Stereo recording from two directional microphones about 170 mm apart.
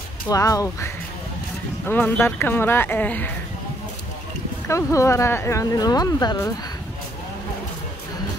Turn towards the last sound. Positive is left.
turn(degrees=25)  # may be behind; listen again after turning